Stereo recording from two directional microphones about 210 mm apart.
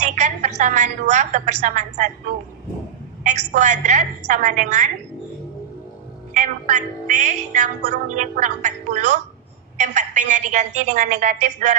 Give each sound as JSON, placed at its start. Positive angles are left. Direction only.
{"t": 0.0, "sound": "speech", "side_deg": -35}
{"t": 3.3, "sound": "speech", "side_deg": -35}
{"t": 6.3, "sound": "speech", "side_deg": -35}